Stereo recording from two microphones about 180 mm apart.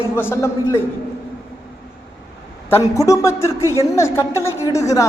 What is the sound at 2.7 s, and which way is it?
A man's voice, 15° left (ahead or behind).